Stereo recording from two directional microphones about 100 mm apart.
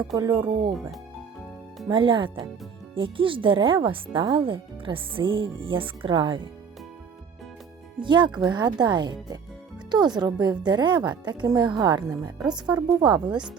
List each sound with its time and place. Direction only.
0.2 s speech: 45° right (ahead or behind)
1.9 s speech: 55° right (ahead or behind)
8.0 s speech: 50° right (ahead or behind)
12.0 s a woman's voice: 35° right (ahead or behind)